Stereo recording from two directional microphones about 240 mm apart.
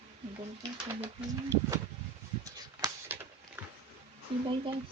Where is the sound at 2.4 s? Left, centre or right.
Centre.